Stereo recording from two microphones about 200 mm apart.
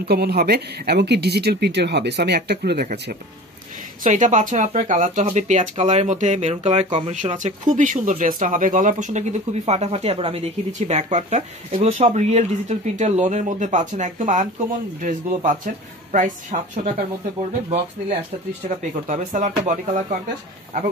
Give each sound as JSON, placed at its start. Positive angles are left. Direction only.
{"t": 0.0, "sound": "speech", "side_deg": -50}
{"t": 4.0, "sound": "speech", "side_deg": -40}
{"t": 19.0, "sound": "speech", "side_deg": -40}